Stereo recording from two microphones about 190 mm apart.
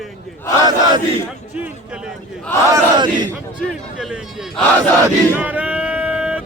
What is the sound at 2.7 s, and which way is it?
Battle cry, 20° right (ahead or behind).